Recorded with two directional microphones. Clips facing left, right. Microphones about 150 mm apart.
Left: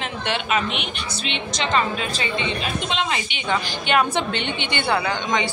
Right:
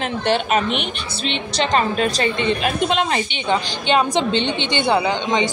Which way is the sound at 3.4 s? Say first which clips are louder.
Right 3 dB; 25° right (ahead or behind).